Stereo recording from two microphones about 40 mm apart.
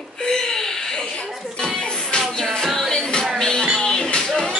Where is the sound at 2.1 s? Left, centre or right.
Centre.